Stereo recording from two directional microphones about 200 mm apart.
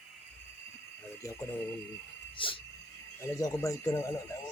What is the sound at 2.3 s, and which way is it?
Speech, 25° left (ahead or behind).